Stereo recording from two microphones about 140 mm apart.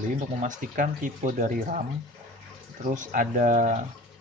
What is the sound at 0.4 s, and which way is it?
Speech, 65° right (ahead or behind).